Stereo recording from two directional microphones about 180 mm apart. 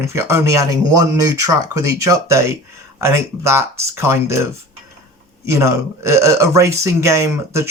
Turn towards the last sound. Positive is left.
turn(degrees=-15)  # may be behind; listen again after turning